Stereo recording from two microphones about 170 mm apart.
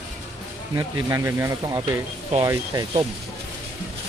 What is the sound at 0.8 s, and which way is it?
Speech, 15° right (ahead or behind).